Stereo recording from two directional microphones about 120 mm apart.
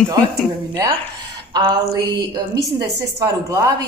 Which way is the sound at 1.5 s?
35° right (ahead or behind).